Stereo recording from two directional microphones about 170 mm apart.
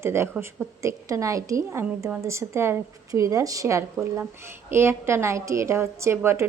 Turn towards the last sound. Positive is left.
turn(degrees=-15)  # may be behind; listen again after turning